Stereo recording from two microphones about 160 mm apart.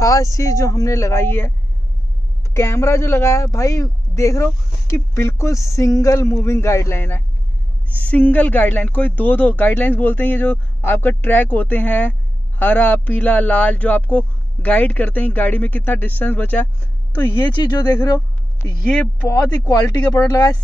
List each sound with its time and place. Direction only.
0.0 s speech: 20° left (ahead or behind)
2.5 s speech: 15° left (ahead or behind)
17.7 s speech: 25° left (ahead or behind)